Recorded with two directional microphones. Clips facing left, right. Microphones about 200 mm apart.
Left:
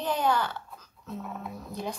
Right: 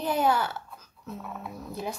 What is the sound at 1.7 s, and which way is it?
Speech, 5° right (ahead or behind).